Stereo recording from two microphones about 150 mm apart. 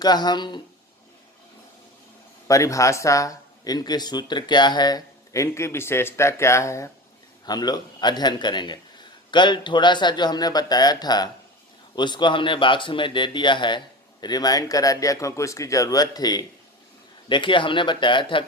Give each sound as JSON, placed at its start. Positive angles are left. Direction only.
{"t": 0.0, "sound": "speech", "side_deg": 30}
{"t": 2.5, "sound": "speech", "side_deg": 20}